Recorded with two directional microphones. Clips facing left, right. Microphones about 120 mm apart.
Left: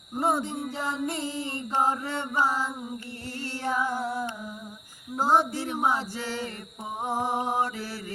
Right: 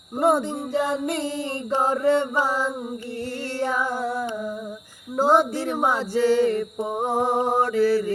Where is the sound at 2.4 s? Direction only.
70° right (ahead or behind).